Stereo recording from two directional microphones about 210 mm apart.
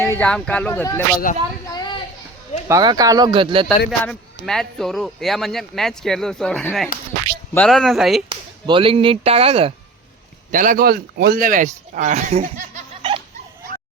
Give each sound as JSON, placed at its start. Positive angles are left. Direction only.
{"t": 0.0, "sound": "speech", "side_deg": 10}
{"t": 1.3, "sound": "speech", "side_deg": 40}
{"t": 1.7, "sound": "a sound", "side_deg": 20}
{"t": 2.6, "sound": "speech", "side_deg": -15}
{"t": 4.0, "sound": "speech", "side_deg": 5}
{"t": 8.3, "sound": "speech", "side_deg": -25}
{"t": 10.5, "sound": "a man's voice", "side_deg": -40}